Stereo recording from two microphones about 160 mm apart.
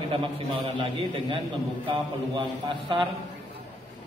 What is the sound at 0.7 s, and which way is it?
A man's voice, 35° right (ahead or behind).